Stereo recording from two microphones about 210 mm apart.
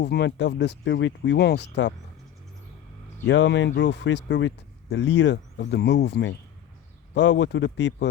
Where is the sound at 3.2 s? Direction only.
60° left (ahead or behind).